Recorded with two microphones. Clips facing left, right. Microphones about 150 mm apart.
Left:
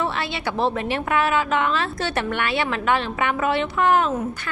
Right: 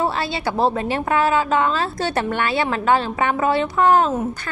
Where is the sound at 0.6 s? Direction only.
35° right (ahead or behind).